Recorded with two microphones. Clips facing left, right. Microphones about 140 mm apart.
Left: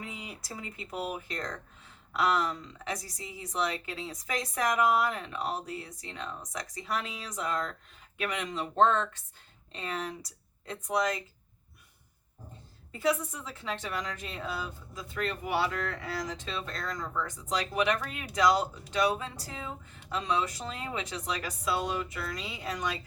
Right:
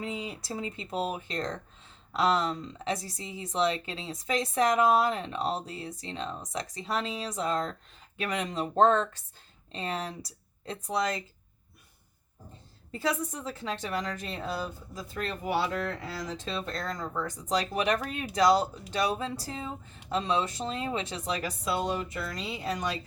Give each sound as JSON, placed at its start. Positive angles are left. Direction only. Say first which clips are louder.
{"t": 0.0, "sound": "speech", "louder": "right 7 dB", "side_deg": -25}
{"t": 12.9, "sound": "speech", "louder": "left 1 dB", "side_deg": -35}